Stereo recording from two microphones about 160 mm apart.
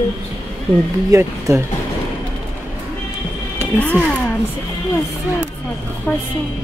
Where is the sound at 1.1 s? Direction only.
20° right (ahead or behind).